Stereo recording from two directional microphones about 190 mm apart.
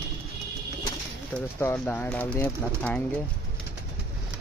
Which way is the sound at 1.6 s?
10° left (ahead or behind).